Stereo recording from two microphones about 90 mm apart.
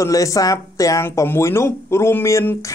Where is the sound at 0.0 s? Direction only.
40° left (ahead or behind).